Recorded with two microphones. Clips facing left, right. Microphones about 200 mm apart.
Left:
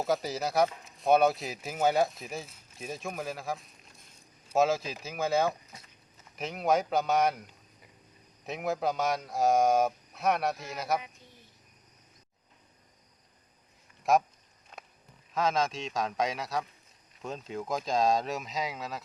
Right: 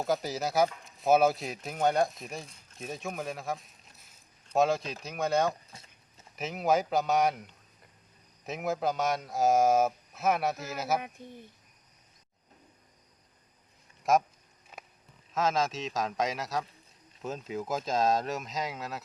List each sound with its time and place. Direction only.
0.0 s speech: centre (ahead or behind)
5.7 s a sound: 25° right (ahead or behind)
6.3 s speech: centre (ahead or behind)
14.0 s speech: centre (ahead or behind)
14.7 s a sound: 5° right (ahead or behind)
15.3 s speech: centre (ahead or behind)